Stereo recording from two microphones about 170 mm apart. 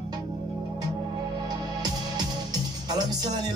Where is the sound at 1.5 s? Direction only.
25° right (ahead or behind).